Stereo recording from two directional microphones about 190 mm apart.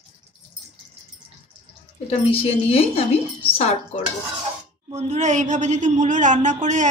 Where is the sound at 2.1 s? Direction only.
30° left (ahead or behind).